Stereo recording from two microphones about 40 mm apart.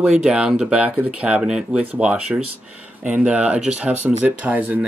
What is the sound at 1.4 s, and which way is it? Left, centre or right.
Speech, centre.